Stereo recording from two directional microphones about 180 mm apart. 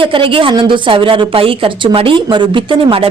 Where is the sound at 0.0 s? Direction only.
30° right (ahead or behind).